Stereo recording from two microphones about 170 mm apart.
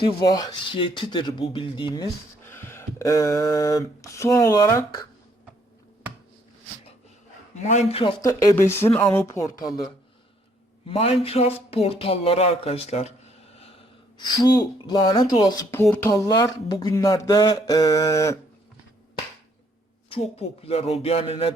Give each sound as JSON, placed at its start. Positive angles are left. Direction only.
{"t": 0.0, "sound": "speech", "side_deg": 25}
{"t": 2.4, "sound": "speech", "side_deg": 15}
{"t": 7.6, "sound": "speech", "side_deg": 45}
{"t": 8.2, "sound": "speech", "side_deg": 20}
{"t": 10.8, "sound": "speech", "side_deg": 35}
{"t": 20.3, "sound": "speech", "side_deg": 35}